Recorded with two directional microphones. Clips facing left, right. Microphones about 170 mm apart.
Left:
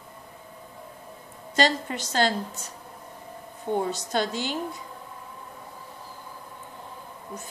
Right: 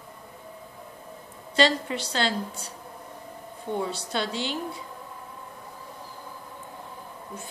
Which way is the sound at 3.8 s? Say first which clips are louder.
Left 2 dB; 45° left (ahead or behind).